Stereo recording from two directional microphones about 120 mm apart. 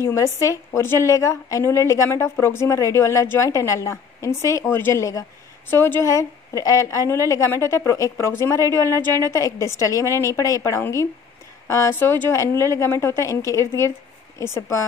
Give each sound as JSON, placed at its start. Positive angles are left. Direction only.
{"t": 0.0, "sound": "a woman's voice", "side_deg": 25}